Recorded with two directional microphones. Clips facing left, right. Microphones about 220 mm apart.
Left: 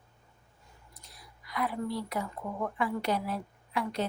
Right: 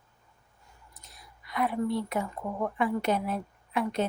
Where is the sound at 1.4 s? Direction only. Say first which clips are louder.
Right 4 dB; 25° right (ahead or behind).